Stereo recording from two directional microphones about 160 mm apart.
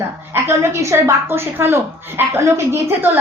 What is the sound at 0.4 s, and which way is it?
Speech, 15° right (ahead or behind).